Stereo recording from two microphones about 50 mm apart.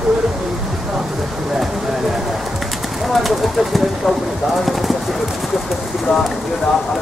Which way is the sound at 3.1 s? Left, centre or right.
Centre.